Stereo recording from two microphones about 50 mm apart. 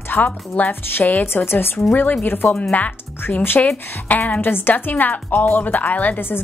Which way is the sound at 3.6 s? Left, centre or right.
Left.